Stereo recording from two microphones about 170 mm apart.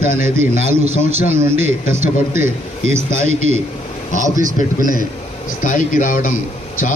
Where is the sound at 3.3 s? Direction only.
40° right (ahead or behind).